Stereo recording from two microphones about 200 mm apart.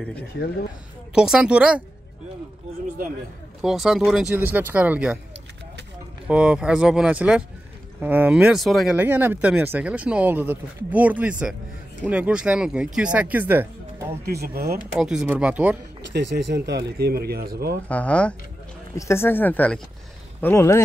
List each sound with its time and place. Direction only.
1.1 s speech: 5° right (ahead or behind)
3.6 s speech: centre (ahead or behind)
6.2 s speech: 5° right (ahead or behind)
14.2 s speech: 50° right (ahead or behind)
15.0 s speech: 5° right (ahead or behind)
16.1 s speech: 60° right (ahead or behind)
17.8 s speech: 5° left (ahead or behind)